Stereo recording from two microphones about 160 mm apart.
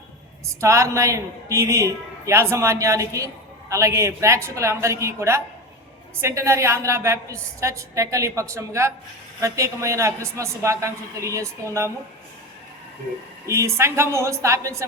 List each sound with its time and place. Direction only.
0.4 s a woman's voice: 20° right (ahead or behind)
13.5 s a woman's voice: 15° right (ahead or behind)